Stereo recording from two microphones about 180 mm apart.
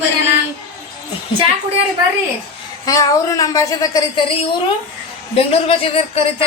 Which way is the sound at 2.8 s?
20° left (ahead or behind).